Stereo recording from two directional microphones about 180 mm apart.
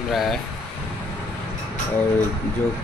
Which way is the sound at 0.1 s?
Centre (ahead or behind).